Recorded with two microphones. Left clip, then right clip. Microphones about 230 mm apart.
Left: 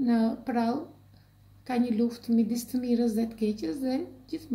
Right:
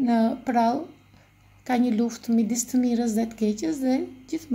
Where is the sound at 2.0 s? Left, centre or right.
Right.